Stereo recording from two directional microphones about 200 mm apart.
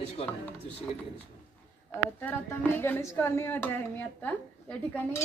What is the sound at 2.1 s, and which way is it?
Speech, 10° left (ahead or behind).